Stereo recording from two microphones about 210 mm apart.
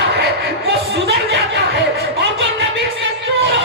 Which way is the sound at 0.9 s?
55° right (ahead or behind).